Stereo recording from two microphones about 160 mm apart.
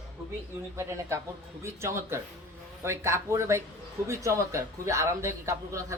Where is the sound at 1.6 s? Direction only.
15° right (ahead or behind).